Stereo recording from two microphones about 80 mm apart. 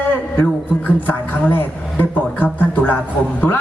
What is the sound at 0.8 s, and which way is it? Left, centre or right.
Speech, left.